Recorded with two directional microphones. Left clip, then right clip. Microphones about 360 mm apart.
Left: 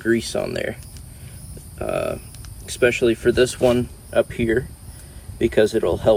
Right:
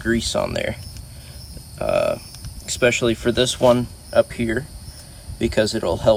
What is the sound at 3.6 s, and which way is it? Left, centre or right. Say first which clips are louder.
Speech: right 2 dB; right.